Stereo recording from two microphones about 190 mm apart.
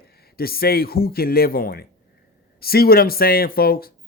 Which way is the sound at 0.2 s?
55° left (ahead or behind).